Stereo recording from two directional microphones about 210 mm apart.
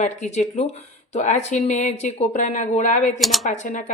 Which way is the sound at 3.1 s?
Centre (ahead or behind).